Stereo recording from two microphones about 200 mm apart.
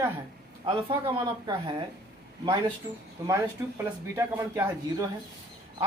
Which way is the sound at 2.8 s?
15° right (ahead or behind).